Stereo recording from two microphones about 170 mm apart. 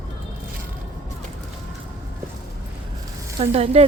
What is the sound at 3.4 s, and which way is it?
Speech, 35° right (ahead or behind).